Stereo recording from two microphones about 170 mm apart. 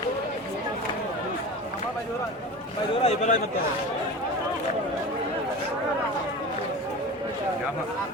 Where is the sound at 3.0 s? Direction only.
45° left (ahead or behind).